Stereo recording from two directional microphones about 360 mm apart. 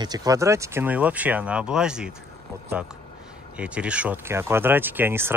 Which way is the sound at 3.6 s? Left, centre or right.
Centre.